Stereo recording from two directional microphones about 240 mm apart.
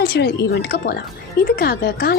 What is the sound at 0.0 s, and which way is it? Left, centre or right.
Speech, left.